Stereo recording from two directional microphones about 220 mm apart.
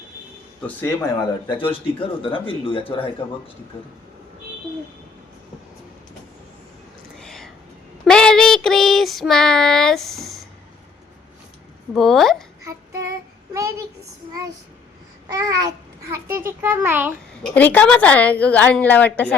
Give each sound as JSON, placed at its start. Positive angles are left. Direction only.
{"t": 0.8, "sound": "a woman's voice", "side_deg": 10}
{"t": 1.5, "sound": "speech", "side_deg": 25}
{"t": 7.2, "sound": "whispering", "side_deg": 0}
{"t": 8.0, "sound": "child singing", "side_deg": 5}
{"t": 11.9, "sound": "speech", "side_deg": 0}
{"t": 13.5, "sound": "a child's voice", "side_deg": -15}
{"t": 15.3, "sound": "a child's voice", "side_deg": -15}
{"t": 17.4, "sound": "a woman's voice", "side_deg": 5}